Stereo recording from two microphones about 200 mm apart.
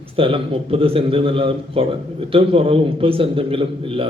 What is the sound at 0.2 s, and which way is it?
A man's voice, 25° right (ahead or behind).